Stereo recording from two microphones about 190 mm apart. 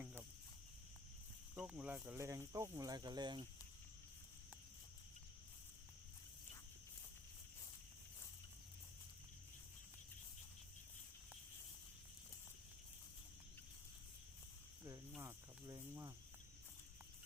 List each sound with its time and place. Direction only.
0.0 s cricket: 10° right (ahead or behind)
1.5 s speech: 5° right (ahead or behind); by 3.4 s 20° right (ahead or behind)
15.2 s cricket: 15° right (ahead or behind)